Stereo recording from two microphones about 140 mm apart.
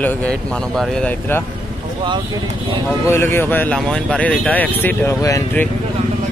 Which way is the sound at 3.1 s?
15° left (ahead or behind).